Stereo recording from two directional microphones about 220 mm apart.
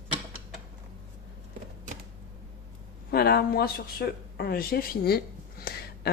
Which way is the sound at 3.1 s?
45° left (ahead or behind).